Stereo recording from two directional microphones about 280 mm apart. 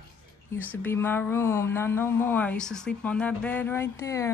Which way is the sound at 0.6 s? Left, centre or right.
Centre.